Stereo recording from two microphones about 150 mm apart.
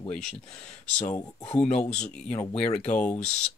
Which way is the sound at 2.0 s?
5° left (ahead or behind).